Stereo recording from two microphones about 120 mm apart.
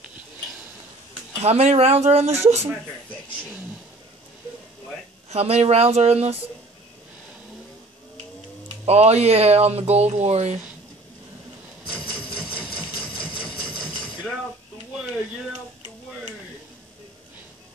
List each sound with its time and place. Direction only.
1.4 s speech: 60° right (ahead or behind)
5.3 s speech: 60° right (ahead or behind)
8.8 s speech: 60° right (ahead or behind)
12.5 s sewing machine: 10° left (ahead or behind)